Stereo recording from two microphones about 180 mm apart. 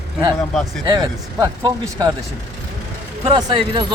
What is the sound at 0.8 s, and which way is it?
Speech, 20° right (ahead or behind).